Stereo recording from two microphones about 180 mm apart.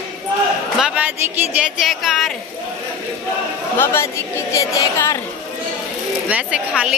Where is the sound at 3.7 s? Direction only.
15° left (ahead or behind).